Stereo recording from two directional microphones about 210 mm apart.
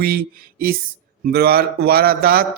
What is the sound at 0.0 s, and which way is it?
A man's voice, 45° right (ahead or behind).